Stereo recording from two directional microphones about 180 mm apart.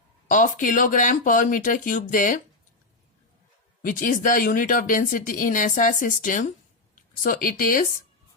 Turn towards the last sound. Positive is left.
turn(degrees=50)  # may be behind; listen again after turning